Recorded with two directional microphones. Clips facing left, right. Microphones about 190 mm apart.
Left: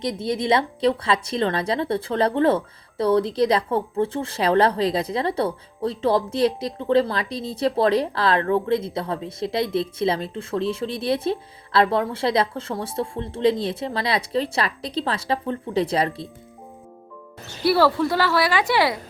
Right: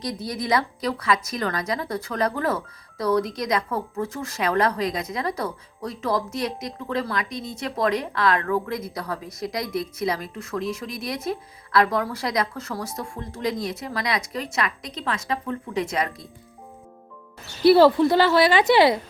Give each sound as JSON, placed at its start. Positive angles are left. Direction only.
{"t": 0.0, "sound": "speech", "side_deg": 25}
{"t": 17.6, "sound": "a woman's voice", "side_deg": -20}